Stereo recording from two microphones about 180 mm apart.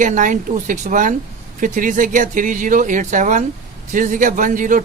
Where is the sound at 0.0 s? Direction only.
45° right (ahead or behind).